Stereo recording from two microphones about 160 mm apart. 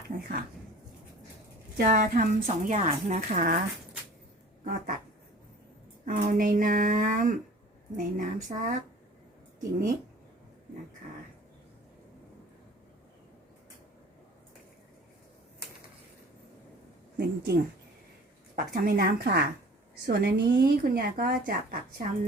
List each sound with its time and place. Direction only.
0.1 s a sound: 50° right (ahead or behind)
1.8 s a woman's voice: 60° right (ahead or behind)
4.6 s a woman's voice: 65° right (ahead or behind)
6.1 s a woman's voice: 55° right (ahead or behind)
17.2 s a woman's voice: 90° right
18.5 s speech: 60° right (ahead or behind)